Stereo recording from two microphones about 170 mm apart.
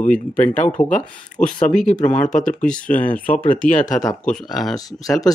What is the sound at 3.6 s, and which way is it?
Speech, 50° left (ahead or behind).